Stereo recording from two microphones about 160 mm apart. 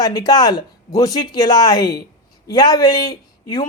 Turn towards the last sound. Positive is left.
turn(degrees=25)  # may be behind; listen again after turning